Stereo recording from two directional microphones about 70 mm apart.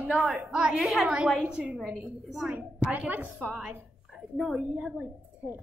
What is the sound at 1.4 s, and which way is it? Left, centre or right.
A woman's voice, centre.